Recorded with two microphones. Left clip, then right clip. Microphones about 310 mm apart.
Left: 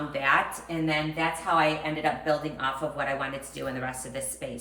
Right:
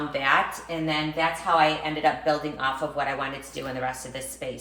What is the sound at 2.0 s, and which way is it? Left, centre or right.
A woman's voice, centre.